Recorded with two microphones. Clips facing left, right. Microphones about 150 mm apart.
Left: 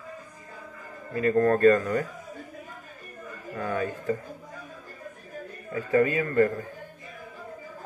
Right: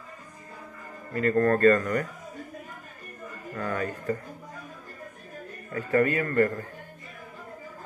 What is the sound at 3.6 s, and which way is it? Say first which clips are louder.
Speech: left 1 dB; 15° left (ahead or behind).